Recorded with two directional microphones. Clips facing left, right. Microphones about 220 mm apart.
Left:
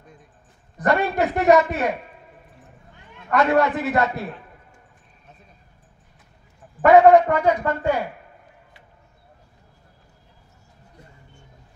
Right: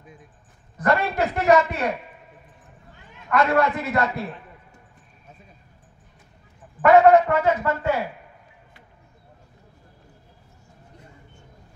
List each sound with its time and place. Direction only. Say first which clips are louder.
0.7 s a man's voice: left 2 dB; centre (ahead or behind)
3.3 s a man's voice: left 2 dB; centre (ahead or behind)
6.9 s a man's voice: left 2 dB; centre (ahead or behind)